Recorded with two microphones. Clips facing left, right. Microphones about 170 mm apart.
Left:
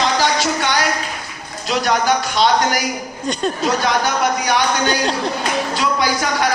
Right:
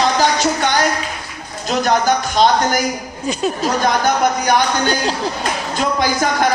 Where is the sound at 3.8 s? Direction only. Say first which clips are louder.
Right 6 dB; 45° right (ahead or behind).